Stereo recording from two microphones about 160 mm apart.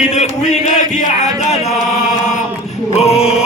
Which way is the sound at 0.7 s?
50° left (ahead or behind).